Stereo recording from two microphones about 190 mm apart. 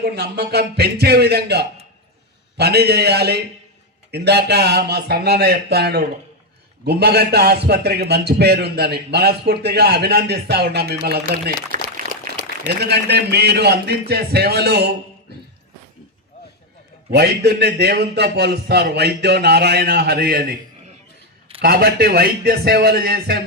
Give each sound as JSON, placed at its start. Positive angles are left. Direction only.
{"t": 0.0, "sound": "a man's voice", "side_deg": -55}
{"t": 12.8, "sound": "a man's voice", "side_deg": -60}
{"t": 17.1, "sound": "a man's voice", "side_deg": -60}
{"t": 21.6, "sound": "a man's voice", "side_deg": -55}